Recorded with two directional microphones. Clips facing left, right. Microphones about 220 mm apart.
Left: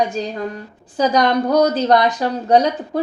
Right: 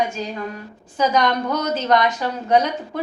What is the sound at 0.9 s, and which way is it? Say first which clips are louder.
A woman's voice: left 3 dB; 35° left (ahead or behind).